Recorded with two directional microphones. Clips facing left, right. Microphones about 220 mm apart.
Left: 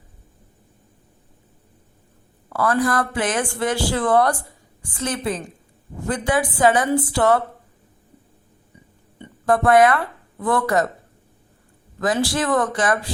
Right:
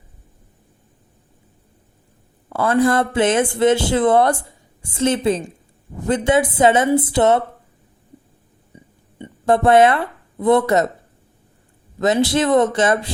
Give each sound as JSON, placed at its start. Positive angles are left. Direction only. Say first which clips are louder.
{"t": 2.5, "sound": "speech", "louder": "right 4 dB", "side_deg": -25}
{"t": 9.1, "sound": "speech", "louder": "right 3 dB", "side_deg": -20}
{"t": 11.9, "sound": "speech", "louder": "right 5 dB", "side_deg": -25}